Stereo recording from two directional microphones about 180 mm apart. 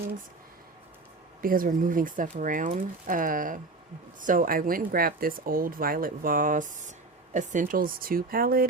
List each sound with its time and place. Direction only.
1.4 s speech: 50° right (ahead or behind)